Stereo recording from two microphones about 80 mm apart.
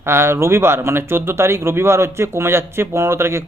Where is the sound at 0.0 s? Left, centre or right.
Right.